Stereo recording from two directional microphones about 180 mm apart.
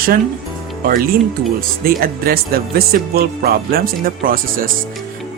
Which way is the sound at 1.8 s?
55° right (ahead or behind).